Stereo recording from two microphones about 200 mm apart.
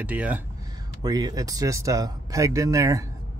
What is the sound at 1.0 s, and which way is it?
Speech, 20° right (ahead or behind).